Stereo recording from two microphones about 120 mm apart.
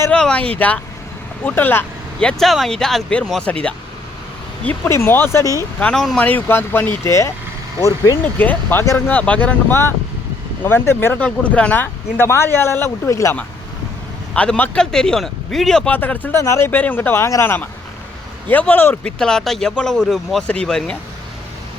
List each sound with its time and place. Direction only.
0.1 s speech: 10° left (ahead or behind)
1.5 s speech: 15° left (ahead or behind)
2.2 s speech: centre (ahead or behind)
4.9 s speech: 20° left (ahead or behind)
5.8 s speech: 5° left (ahead or behind); by 8.2 s 30° left (ahead or behind)
8.2 s speech: 15° left (ahead or behind)
14.3 s speech: 10° left (ahead or behind)
15.9 s speech: 15° left (ahead or behind)
19.2 s speech: 5° left (ahead or behind)